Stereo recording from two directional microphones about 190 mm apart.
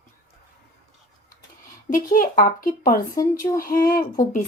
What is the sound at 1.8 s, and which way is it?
Speech, 45° left (ahead or behind).